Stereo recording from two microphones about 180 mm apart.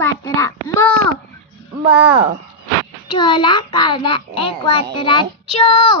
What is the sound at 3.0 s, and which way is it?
A child's voice, 25° left (ahead or behind).